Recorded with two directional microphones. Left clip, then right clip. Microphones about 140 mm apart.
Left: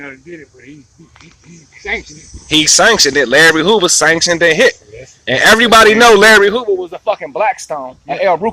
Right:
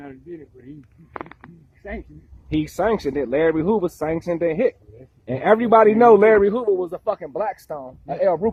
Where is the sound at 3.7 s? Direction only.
50° left (ahead or behind).